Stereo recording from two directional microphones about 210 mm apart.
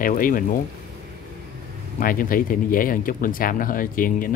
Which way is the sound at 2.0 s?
40° left (ahead or behind).